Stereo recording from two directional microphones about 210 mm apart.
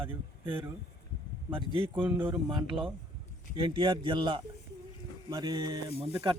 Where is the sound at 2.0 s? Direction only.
10° right (ahead or behind).